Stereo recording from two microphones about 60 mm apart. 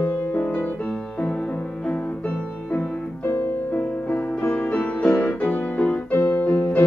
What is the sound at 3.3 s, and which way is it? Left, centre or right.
Music, left.